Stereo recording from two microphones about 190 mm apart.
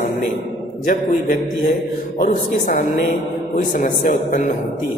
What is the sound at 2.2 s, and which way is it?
A man's voice, 45° left (ahead or behind).